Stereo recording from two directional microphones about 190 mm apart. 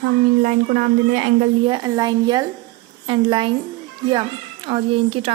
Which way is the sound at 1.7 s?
20° right (ahead or behind).